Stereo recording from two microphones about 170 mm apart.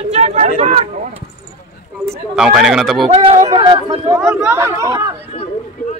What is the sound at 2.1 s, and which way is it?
Speech, 5° right (ahead or behind).